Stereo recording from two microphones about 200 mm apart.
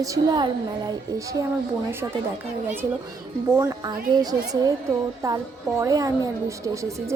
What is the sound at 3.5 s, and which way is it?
A woman's voice, 15° right (ahead or behind).